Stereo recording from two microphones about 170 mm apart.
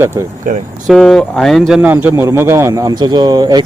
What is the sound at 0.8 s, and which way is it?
Speech, 5° left (ahead or behind).